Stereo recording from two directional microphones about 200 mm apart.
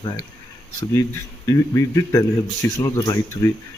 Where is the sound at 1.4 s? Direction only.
15° left (ahead or behind).